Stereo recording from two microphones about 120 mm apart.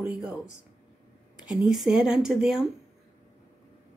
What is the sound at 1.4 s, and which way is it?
Speech, 5° right (ahead or behind).